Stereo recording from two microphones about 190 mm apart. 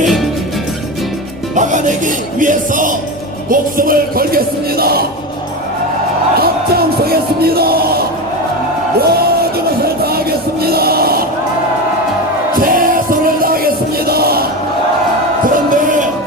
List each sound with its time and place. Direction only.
1.5 s music: 40° right (ahead or behind)
6.4 s music: 55° right (ahead or behind)
12.5 s music: 50° right (ahead or behind)
15.4 s music: 45° right (ahead or behind)